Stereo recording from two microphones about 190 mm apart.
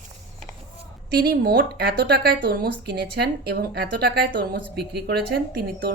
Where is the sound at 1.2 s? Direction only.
55° right (ahead or behind).